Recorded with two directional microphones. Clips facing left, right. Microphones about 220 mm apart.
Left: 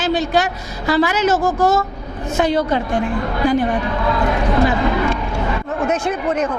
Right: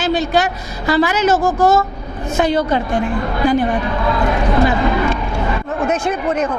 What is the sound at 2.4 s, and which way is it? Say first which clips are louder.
A woman's voice: right 1 dB; 20° right (ahead or behind).